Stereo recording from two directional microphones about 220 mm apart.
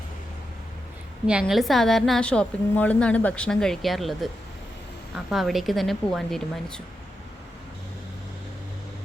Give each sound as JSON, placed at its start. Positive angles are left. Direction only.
{"t": 1.3, "sound": "a woman's voice", "side_deg": 0}